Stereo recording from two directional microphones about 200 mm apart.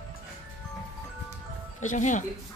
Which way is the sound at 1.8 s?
40° left (ahead or behind).